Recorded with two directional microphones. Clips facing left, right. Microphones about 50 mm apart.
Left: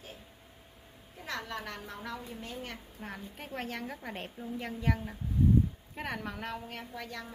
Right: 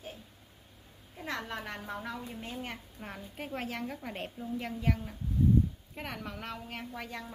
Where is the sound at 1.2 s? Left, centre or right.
Centre.